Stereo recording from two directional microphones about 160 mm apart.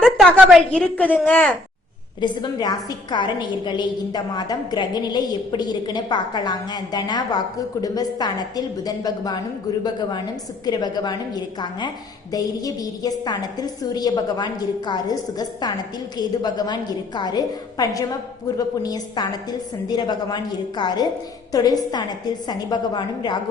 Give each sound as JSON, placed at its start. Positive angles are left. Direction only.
{"t": 0.0, "sound": "a woman's voice", "side_deg": 0}
{"t": 2.2, "sound": "a woman's voice", "side_deg": 30}
{"t": 10.7, "sound": "a woman's voice", "side_deg": 25}